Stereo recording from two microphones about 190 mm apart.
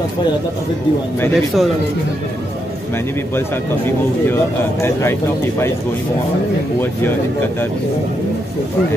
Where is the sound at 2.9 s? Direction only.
10° left (ahead or behind).